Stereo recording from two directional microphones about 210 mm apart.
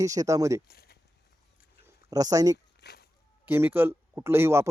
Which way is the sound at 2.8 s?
50° left (ahead or behind).